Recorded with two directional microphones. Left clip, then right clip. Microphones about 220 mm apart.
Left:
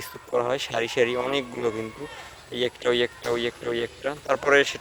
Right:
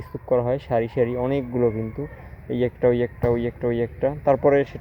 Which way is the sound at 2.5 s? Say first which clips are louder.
Right 3 dB; 25° left (ahead or behind).